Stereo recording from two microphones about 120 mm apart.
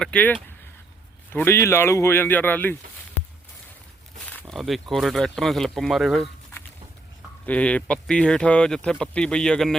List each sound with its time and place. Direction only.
0.0 s speech: 10° left (ahead or behind)
4.3 s a sound: 15° left (ahead or behind)
4.5 s speech: centre (ahead or behind)
7.4 s speech: 10° left (ahead or behind)